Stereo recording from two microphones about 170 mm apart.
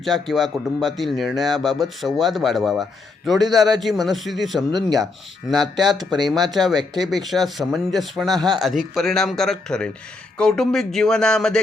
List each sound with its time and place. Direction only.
0.0 s speech: centre (ahead or behind)
6.1 s speech: 25° right (ahead or behind)
6.3 s speech: centre (ahead or behind)